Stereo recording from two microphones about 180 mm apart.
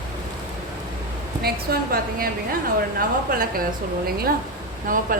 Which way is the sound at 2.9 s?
55° right (ahead or behind).